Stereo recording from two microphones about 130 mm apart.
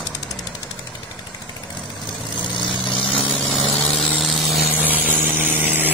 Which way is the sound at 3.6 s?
10° left (ahead or behind).